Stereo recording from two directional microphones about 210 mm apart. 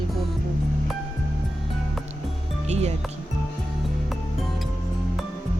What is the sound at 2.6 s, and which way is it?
Speech, 30° right (ahead or behind).